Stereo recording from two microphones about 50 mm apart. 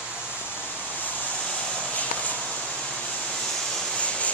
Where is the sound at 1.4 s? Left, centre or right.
Centre.